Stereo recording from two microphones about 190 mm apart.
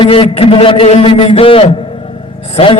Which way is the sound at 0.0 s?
30° left (ahead or behind).